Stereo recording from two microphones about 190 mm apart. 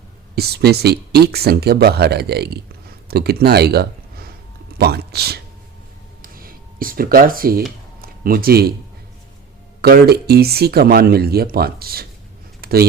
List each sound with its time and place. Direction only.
0.3 s speech: 55° right (ahead or behind)
6.2 s a sound: 50° right (ahead or behind)
8.0 s speech: 50° right (ahead or behind)
9.8 s speech: 55° right (ahead or behind)
12.6 s computer keyboard: 55° right (ahead or behind)